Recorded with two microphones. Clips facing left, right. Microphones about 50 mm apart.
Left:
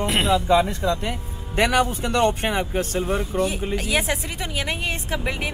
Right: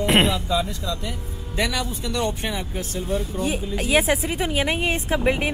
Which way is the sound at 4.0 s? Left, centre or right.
Centre.